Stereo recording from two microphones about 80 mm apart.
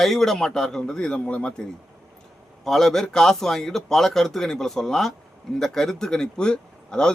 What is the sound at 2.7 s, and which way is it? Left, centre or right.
A man's voice, centre.